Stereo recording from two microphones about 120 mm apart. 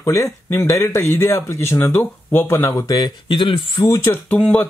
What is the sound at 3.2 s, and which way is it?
Speech, 45° left (ahead or behind).